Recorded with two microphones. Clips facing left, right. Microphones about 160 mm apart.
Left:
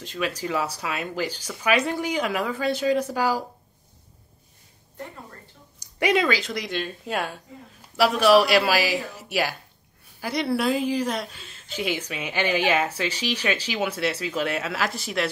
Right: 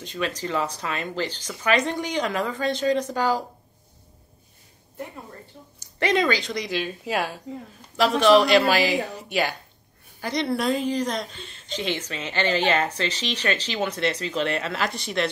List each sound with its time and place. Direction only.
0.0 s a woman's voice: 5° left (ahead or behind)
5.8 s a woman's voice: 10° left (ahead or behind)